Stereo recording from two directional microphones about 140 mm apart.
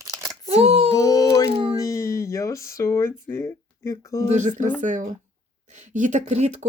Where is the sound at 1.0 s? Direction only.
25° left (ahead or behind).